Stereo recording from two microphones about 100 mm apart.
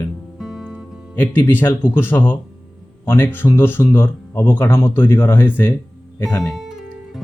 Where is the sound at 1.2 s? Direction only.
20° left (ahead or behind).